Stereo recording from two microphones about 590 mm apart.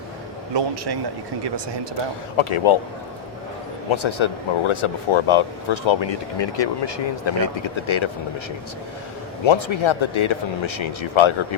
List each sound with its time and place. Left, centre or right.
0.5 s speech: right
2.3 s speech: left
3.9 s speech: left
9.4 s speech: left